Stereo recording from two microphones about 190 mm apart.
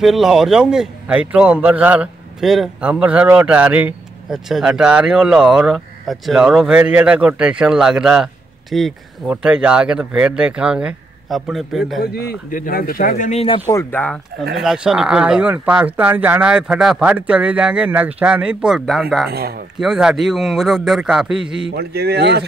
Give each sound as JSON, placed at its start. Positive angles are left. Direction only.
{"t": 0.0, "sound": "a man's voice", "side_deg": 0}
{"t": 12.0, "sound": "speech", "side_deg": 50}
{"t": 13.7, "sound": "a man's voice", "side_deg": 10}
{"t": 19.3, "sound": "a man's voice", "side_deg": -55}
{"t": 19.8, "sound": "a man's voice", "side_deg": -5}
{"t": 21.6, "sound": "a man's voice", "side_deg": -60}